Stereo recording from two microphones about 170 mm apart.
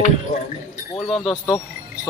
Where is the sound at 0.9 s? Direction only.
Centre (ahead or behind).